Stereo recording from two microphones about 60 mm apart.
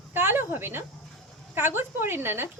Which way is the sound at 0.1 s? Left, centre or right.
Right.